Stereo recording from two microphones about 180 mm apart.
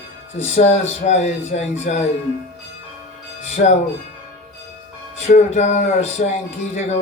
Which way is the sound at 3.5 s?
40° left (ahead or behind).